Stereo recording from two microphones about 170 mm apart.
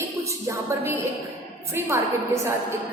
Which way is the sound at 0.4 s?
15° right (ahead or behind).